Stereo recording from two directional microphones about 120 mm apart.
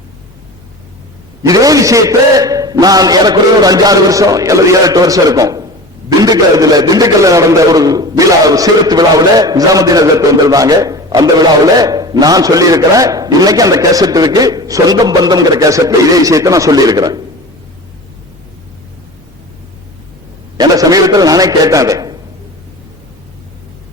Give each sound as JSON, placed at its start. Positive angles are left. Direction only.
{"t": 1.4, "sound": "a man's voice", "side_deg": -30}
{"t": 20.6, "sound": "a man's voice", "side_deg": -30}